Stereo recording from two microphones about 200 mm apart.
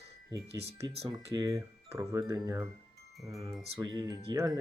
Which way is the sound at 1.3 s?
15° right (ahead or behind).